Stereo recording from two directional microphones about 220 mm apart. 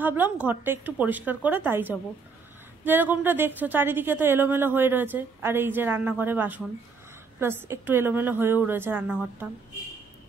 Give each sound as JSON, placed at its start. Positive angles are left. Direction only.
{"t": 0.0, "sound": "a woman's voice", "side_deg": -10}